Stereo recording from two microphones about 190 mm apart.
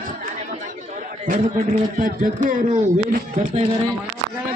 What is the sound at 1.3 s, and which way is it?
A man's voice, 45° right (ahead or behind).